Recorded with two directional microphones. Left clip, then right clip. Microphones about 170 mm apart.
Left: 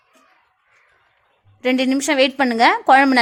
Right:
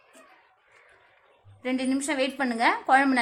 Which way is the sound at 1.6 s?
50° left (ahead or behind).